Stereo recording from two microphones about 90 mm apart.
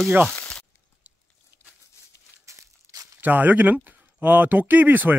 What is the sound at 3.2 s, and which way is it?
Speech, 20° right (ahead or behind).